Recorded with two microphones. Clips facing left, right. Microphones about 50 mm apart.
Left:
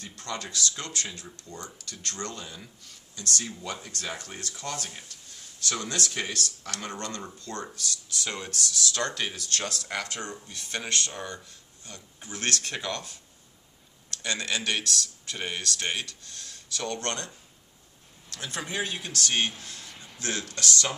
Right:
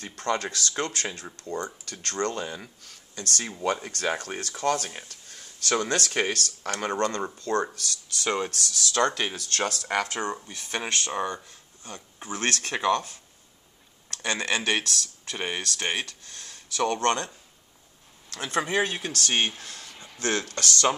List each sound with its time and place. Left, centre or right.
0.0 s speech: right
14.1 s speech: right
18.3 s speech: right